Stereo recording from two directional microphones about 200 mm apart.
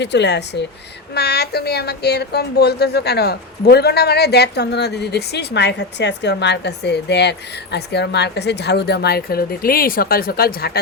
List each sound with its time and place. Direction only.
0.0 s a woman's voice: 60° left (ahead or behind)